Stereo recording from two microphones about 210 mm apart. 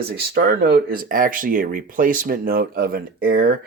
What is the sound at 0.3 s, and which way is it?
Speech, 50° right (ahead or behind).